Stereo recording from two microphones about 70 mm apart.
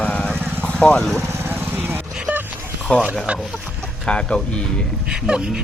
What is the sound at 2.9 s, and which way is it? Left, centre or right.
Speech, centre.